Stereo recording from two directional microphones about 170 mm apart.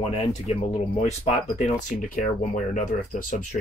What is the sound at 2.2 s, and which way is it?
Speech, 50° left (ahead or behind).